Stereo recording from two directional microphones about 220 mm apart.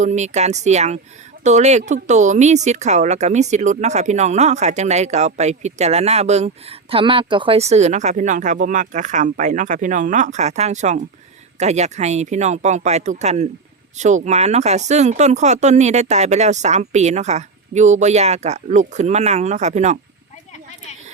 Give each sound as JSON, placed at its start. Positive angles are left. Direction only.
{"t": 0.0, "sound": "speech", "side_deg": -30}